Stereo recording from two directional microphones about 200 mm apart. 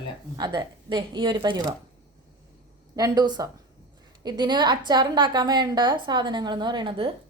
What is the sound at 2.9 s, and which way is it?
A woman's voice, 20° right (ahead or behind).